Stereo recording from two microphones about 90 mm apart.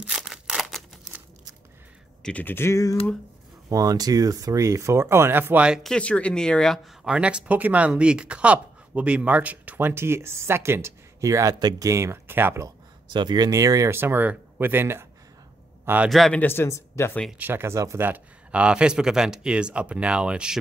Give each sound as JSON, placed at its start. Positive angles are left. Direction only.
{"t": 0.0, "sound": "scissors", "side_deg": -5}
{"t": 2.2, "sound": "a man's voice", "side_deg": 20}
{"t": 3.6, "sound": "speech", "side_deg": -40}
{"t": 5.8, "sound": "speech", "side_deg": 10}
{"t": 7.1, "sound": "speech", "side_deg": -10}
{"t": 13.1, "sound": "speech", "side_deg": -55}
{"t": 13.9, "sound": "a man's voice", "side_deg": -25}
{"t": 16.1, "sound": "a man's voice", "side_deg": 0}
{"t": 16.3, "sound": "a man's voice", "side_deg": 25}
{"t": 17.4, "sound": "speech", "side_deg": -25}
{"t": 18.0, "sound": "speech", "side_deg": -15}